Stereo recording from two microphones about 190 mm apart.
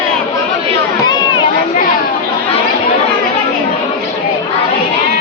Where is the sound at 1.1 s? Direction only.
25° left (ahead or behind).